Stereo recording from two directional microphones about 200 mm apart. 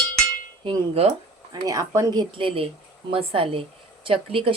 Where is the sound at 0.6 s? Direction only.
25° right (ahead or behind).